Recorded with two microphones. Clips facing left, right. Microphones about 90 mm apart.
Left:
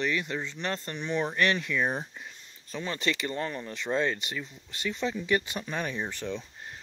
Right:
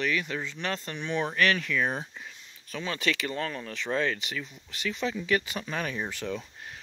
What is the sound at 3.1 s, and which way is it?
Speech, centre (ahead or behind).